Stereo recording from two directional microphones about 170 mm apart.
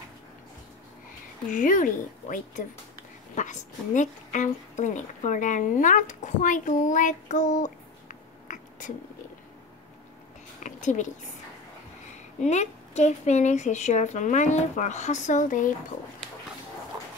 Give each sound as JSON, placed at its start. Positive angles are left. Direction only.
{"t": 1.5, "sound": "a woman's voice", "side_deg": 50}
{"t": 10.6, "sound": "a sound", "side_deg": 45}
{"t": 12.4, "sound": "a woman's voice", "side_deg": 40}